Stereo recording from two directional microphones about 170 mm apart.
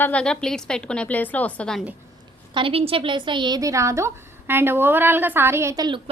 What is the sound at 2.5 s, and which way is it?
A woman's voice, 35° right (ahead or behind).